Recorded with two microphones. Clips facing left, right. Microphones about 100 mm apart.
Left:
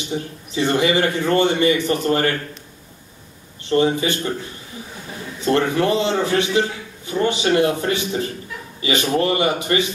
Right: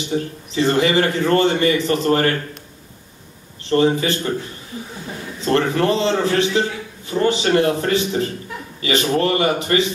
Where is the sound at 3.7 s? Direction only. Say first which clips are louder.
Right 1 dB; 20° left (ahead or behind).